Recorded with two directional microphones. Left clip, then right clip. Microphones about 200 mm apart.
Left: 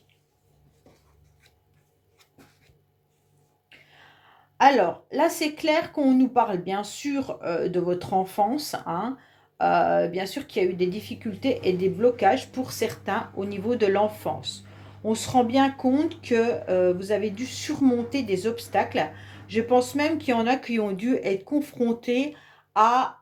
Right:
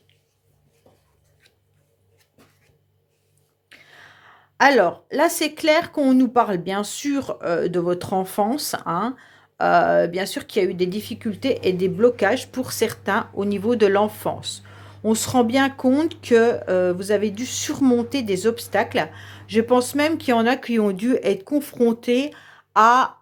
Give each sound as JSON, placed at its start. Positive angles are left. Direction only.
{"t": 3.7, "sound": "gasp", "side_deg": -45}
{"t": 4.5, "sound": "speech", "side_deg": -45}